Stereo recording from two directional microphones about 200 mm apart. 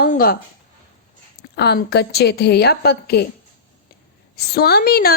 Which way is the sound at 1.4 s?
55° left (ahead or behind).